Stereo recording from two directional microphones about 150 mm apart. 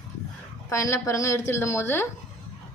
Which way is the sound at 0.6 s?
20° left (ahead or behind).